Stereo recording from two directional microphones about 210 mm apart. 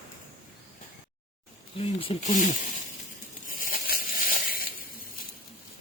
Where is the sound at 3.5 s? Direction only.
40° left (ahead or behind).